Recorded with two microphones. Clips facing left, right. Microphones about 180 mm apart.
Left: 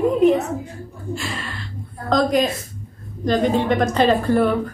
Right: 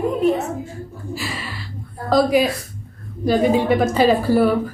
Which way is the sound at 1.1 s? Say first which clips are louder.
Left 1 dB; 5° right (ahead or behind).